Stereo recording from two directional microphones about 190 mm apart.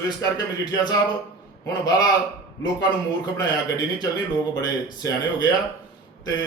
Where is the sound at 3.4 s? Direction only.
20° left (ahead or behind).